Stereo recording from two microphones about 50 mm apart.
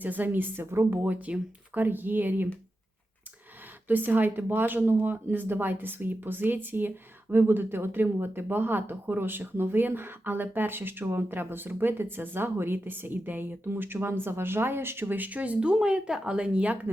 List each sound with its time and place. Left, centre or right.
0.0 s speech: right
1.0 s speech: right
3.8 s speech: right
15.7 s speech: centre